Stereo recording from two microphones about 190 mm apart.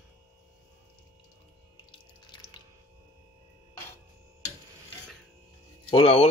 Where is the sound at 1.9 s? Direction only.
25° left (ahead or behind).